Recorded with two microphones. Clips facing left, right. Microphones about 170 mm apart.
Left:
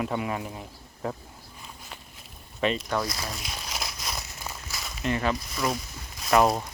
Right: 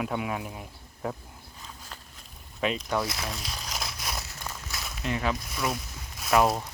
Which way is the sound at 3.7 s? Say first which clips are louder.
Even; centre (ahead or behind).